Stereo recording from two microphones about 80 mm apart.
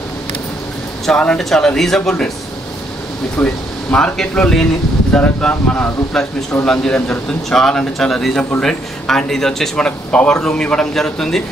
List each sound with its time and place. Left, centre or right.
1.0 s speech: centre
3.3 s speech: centre